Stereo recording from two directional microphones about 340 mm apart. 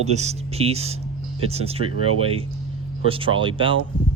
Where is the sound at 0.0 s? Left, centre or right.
Centre.